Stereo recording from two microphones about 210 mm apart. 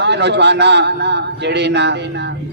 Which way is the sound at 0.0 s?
55° right (ahead or behind).